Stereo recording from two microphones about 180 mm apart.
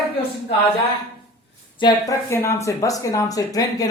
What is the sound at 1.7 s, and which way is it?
Speech, 20° left (ahead or behind).